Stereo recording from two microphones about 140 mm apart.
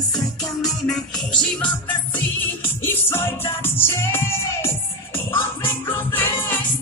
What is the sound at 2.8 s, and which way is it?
Music, 15° left (ahead or behind).